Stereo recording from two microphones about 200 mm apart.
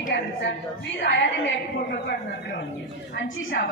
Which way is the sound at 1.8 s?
55° left (ahead or behind).